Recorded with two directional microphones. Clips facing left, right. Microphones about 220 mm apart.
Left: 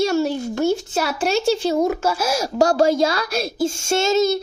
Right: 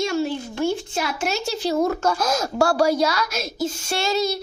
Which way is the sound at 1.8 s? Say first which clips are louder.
Left 1 dB; 10° left (ahead or behind).